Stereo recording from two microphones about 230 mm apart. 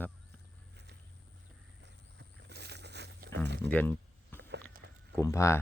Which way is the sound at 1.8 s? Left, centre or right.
Right.